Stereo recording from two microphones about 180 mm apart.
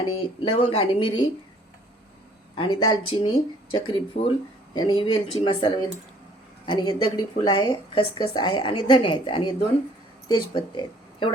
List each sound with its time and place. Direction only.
0.2 s speech: 30° left (ahead or behind)
2.6 s speech: 30° left (ahead or behind)